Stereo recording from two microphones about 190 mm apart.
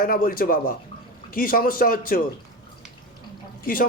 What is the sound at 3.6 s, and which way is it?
Speech, 50° left (ahead or behind).